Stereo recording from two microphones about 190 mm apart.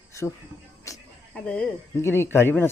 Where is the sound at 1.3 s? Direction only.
5° left (ahead or behind).